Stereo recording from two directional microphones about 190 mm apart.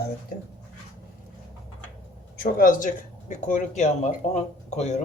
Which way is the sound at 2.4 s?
45° left (ahead or behind).